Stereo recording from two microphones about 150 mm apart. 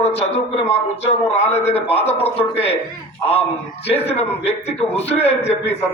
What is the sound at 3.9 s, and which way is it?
A man's voice, 40° left (ahead or behind).